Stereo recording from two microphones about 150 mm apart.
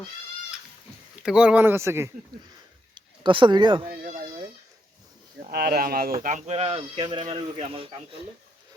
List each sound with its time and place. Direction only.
1.1 s speech: 5° right (ahead or behind)
2.9 s speech: 35° right (ahead or behind)
3.8 s speech: 70° right (ahead or behind)
5.4 s speech: 90° right
6.2 s speech: 50° right (ahead or behind)
6.7 s speech: 30° right (ahead or behind)